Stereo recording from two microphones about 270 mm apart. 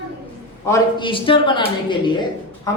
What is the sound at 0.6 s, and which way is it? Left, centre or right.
A woman's voice, centre.